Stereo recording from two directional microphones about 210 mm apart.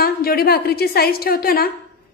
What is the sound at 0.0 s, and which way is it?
A woman's voice, 45° left (ahead or behind).